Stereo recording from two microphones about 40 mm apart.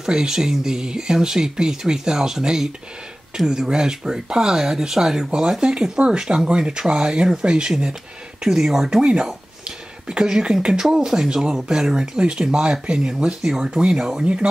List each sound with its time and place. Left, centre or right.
0.0 s speech: centre
9.0 s a sound: right
10.2 s speech: centre